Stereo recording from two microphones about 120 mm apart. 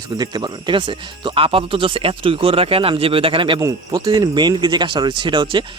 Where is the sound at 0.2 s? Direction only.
35° right (ahead or behind).